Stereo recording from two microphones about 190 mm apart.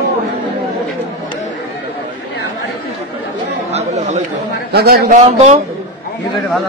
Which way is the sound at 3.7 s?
35° right (ahead or behind).